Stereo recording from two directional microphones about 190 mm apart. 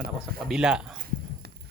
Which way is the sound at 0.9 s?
50° right (ahead or behind).